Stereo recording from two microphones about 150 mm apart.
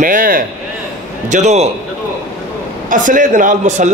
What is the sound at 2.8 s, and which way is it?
A man's voice, 60° right (ahead or behind).